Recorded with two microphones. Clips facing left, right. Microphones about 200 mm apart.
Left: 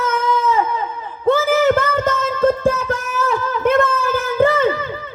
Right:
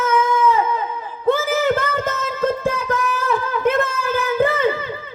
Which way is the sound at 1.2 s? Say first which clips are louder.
Left 3 dB; 50° left (ahead or behind).